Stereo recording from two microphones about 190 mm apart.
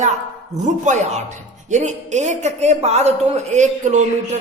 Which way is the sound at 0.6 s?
40° right (ahead or behind).